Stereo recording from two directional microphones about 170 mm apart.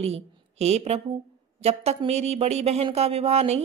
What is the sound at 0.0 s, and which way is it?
A woman's voice, 40° right (ahead or behind).